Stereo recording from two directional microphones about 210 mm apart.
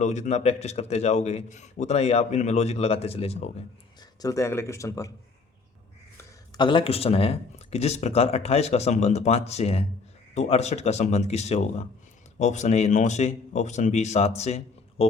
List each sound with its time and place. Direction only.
0.0 s a man's voice: 30° left (ahead or behind)
4.2 s speech: 15° left (ahead or behind)
6.6 s a man's voice: 25° left (ahead or behind)